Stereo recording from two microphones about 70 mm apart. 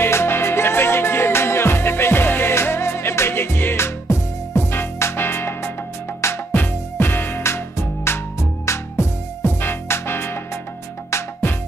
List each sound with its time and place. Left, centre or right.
0.0 s music: left